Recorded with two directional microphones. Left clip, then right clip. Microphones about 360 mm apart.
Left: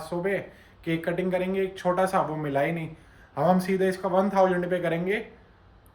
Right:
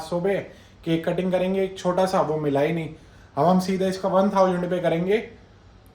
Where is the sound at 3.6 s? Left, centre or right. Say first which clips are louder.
Right 1 dB; centre.